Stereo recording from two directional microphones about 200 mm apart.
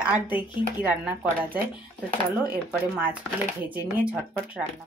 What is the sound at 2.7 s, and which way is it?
Speech, 10° right (ahead or behind).